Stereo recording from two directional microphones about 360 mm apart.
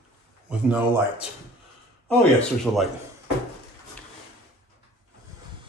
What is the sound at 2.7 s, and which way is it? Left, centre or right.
Speech, centre.